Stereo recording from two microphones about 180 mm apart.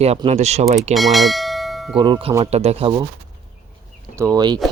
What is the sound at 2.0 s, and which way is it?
Speech, 30° right (ahead or behind).